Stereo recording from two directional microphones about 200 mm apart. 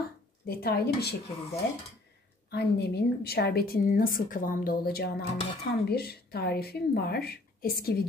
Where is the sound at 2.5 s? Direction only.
55° left (ahead or behind).